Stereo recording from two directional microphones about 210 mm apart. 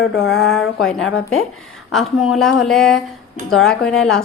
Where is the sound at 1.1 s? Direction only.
75° left (ahead or behind).